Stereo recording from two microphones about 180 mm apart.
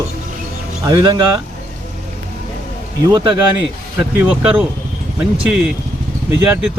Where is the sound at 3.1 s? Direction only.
25° right (ahead or behind).